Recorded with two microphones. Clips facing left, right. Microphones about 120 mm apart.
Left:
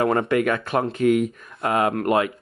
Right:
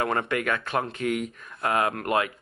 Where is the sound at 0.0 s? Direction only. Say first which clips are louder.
Left 6 dB; 30° left (ahead or behind).